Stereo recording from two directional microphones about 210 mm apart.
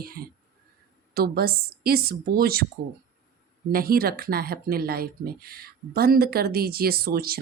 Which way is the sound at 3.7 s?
45° right (ahead or behind).